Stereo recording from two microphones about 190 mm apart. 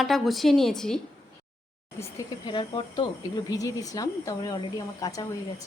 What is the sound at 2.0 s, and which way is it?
A woman's voice, 20° left (ahead or behind).